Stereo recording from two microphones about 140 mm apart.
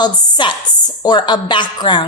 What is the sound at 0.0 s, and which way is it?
A woman's voice, 30° left (ahead or behind).